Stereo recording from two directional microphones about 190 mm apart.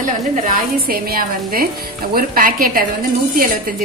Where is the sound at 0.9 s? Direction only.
50° right (ahead or behind).